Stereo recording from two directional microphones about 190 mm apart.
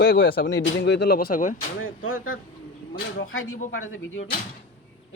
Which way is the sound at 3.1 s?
90° left.